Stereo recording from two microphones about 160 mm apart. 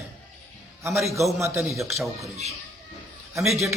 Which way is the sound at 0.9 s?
Centre (ahead or behind).